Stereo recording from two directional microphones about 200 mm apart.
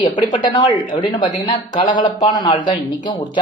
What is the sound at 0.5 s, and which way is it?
Speech, 25° left (ahead or behind).